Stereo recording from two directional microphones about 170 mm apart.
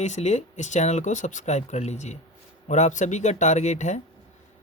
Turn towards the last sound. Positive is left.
turn(degrees=40)  # may be behind; listen again after turning